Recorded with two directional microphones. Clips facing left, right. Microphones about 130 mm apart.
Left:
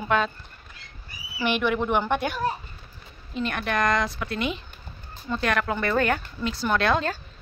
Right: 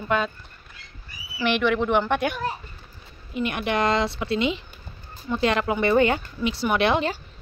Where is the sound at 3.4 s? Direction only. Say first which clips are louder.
Right 2 dB; 15° right (ahead or behind).